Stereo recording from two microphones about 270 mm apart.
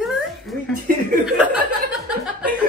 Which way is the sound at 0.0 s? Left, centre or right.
Centre.